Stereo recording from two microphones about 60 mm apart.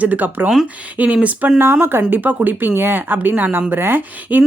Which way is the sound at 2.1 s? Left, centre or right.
Right.